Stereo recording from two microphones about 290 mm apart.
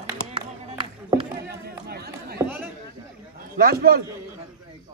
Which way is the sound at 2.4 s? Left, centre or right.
Centre.